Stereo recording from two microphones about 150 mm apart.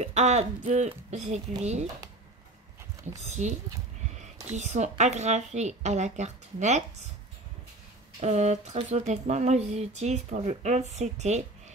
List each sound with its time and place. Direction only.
0.0 s speech: 50° right (ahead or behind)
3.3 s speech: 50° right (ahead or behind)
8.2 s speech: 50° right (ahead or behind)